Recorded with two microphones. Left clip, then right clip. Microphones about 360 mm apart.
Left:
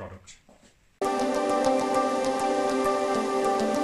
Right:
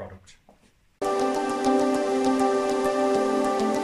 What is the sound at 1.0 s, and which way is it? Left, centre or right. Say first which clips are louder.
Music: right 1 dB; centre.